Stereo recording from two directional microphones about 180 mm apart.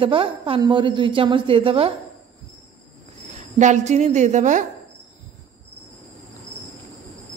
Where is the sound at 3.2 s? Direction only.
40° right (ahead or behind).